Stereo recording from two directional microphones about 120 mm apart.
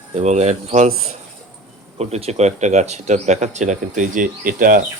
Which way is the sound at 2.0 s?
60° right (ahead or behind).